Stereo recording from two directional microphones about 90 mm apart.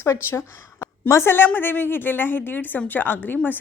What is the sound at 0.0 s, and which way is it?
A woman's voice, 30° left (ahead or behind).